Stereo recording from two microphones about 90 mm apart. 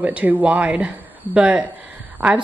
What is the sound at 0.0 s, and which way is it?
A woman's voice, 15° right (ahead or behind).